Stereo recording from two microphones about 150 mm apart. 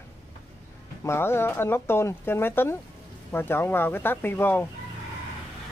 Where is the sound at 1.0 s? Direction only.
15° left (ahead or behind).